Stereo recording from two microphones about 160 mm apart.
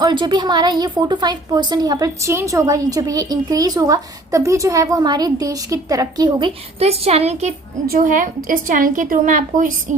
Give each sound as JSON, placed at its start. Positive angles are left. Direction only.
{"t": 0.0, "sound": "a woman's voice", "side_deg": -30}
{"t": 6.7, "sound": "a woman's voice", "side_deg": -40}
{"t": 7.9, "sound": "a woman's voice", "side_deg": -60}